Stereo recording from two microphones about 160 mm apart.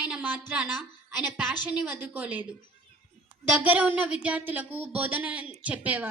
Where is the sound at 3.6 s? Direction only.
10° right (ahead or behind).